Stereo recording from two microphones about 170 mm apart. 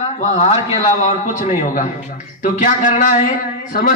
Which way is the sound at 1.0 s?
45° left (ahead or behind).